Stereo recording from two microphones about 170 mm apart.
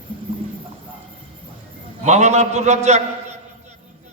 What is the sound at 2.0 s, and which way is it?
Speech, 40° right (ahead or behind).